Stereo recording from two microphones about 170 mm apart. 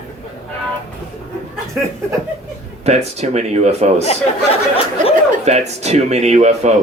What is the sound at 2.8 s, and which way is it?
A man's voice, 40° right (ahead or behind).